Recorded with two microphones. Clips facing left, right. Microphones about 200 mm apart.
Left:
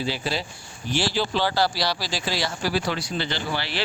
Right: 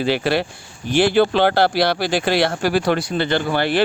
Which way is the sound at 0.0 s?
65° right (ahead or behind).